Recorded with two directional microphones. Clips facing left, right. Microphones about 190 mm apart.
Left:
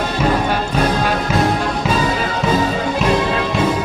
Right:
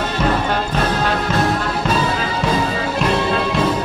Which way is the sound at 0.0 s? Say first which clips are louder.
Left 2 dB; 10° left (ahead or behind).